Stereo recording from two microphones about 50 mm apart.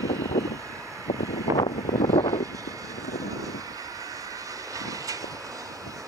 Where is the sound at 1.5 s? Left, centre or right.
Right.